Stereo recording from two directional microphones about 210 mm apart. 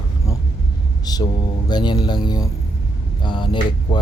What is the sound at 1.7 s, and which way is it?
Speech, 20° left (ahead or behind).